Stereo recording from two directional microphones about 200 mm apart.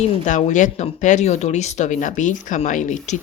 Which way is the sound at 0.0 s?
35° left (ahead or behind).